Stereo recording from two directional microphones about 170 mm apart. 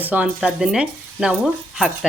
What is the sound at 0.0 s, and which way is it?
Speech, 10° right (ahead or behind).